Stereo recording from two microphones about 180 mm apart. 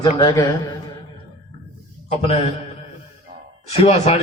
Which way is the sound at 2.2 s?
35° left (ahead or behind).